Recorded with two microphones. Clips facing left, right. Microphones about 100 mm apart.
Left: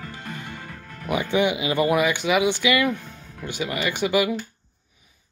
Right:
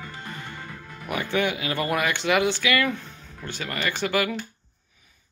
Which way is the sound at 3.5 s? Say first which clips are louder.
Left 3 dB; 15° left (ahead or behind).